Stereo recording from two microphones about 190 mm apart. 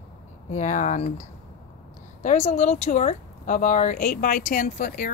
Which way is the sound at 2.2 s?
40° left (ahead or behind).